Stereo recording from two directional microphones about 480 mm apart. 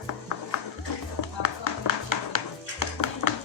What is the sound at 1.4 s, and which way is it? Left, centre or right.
Music, left.